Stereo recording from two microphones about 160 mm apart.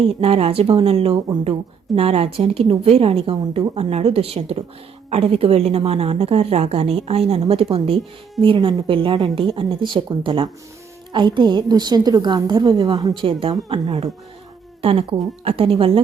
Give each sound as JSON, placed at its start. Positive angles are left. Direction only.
{"t": 0.0, "sound": "a woman's voice", "side_deg": -35}